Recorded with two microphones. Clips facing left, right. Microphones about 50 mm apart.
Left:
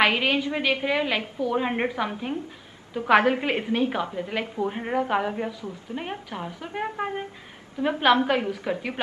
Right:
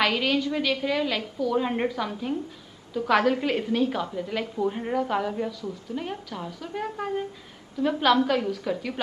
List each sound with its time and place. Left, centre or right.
0.0 s a woman's voice: left